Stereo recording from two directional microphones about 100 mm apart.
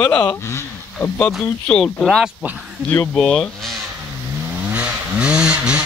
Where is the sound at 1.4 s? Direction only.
10° left (ahead or behind).